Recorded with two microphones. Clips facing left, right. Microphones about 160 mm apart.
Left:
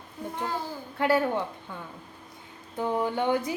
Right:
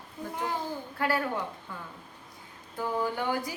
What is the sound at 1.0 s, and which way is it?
Speech, 25° left (ahead or behind).